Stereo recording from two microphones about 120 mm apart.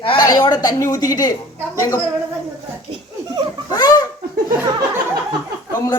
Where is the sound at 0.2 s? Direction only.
35° left (ahead or behind).